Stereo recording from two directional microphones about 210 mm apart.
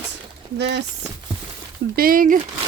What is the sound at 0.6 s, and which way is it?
Speech, 55° right (ahead or behind).